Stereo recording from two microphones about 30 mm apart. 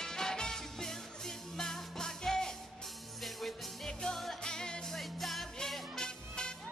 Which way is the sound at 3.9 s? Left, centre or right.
Left.